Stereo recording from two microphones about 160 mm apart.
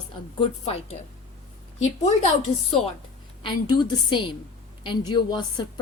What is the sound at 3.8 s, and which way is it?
A woman's voice, 30° left (ahead or behind).